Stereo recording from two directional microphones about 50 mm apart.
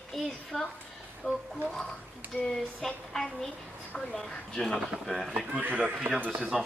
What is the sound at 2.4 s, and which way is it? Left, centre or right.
Speech, centre.